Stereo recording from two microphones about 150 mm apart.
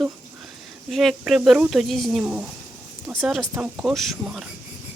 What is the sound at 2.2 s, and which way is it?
Speech, 10° right (ahead or behind).